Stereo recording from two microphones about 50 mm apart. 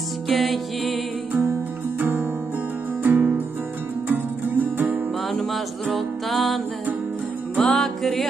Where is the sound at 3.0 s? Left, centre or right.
Right.